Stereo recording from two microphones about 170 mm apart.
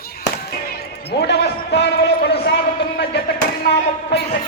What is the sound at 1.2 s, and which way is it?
Speech, 75° left (ahead or behind).